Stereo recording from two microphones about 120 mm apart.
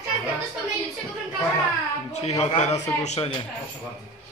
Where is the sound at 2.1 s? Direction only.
65° left (ahead or behind).